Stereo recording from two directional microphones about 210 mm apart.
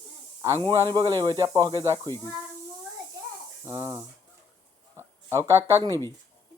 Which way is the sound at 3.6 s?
15° right (ahead or behind).